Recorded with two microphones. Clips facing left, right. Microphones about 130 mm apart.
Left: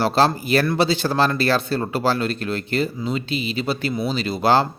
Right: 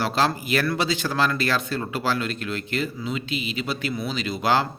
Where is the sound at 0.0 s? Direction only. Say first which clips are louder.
Left 5 dB; 30° left (ahead or behind).